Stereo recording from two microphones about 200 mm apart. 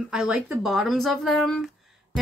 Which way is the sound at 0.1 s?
5° right (ahead or behind).